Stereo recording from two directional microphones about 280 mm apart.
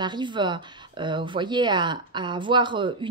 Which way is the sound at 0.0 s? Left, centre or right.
Centre.